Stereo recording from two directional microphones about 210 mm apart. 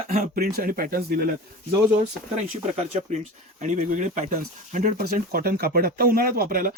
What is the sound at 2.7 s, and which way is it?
Speech, 30° right (ahead or behind).